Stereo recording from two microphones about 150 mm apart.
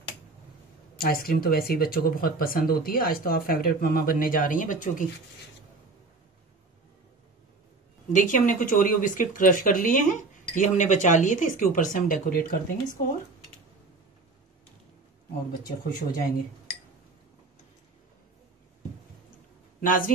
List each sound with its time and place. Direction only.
0.9 s speech: 80° left; by 5.0 s 60° left (ahead or behind)
8.1 s speech: 60° left (ahead or behind)
15.6 s speech: 90° left
19.8 s speech: 65° left (ahead or behind)